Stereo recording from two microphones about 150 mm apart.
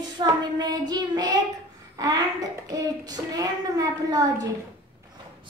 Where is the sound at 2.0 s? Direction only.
25° right (ahead or behind).